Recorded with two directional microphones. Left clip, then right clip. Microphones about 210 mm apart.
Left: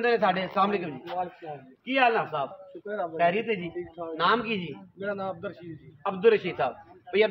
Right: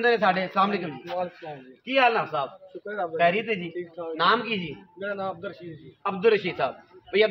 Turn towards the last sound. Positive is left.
turn(degrees=0)  # may be behind; listen again after turning